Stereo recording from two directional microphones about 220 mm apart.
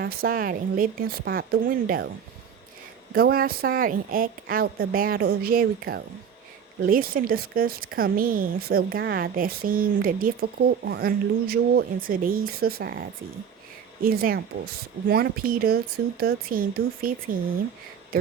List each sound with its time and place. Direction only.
0.0 s a woman's voice: 45° right (ahead or behind)
3.2 s speech: 45° right (ahead or behind)
14.0 s a woman's voice: 40° right (ahead or behind)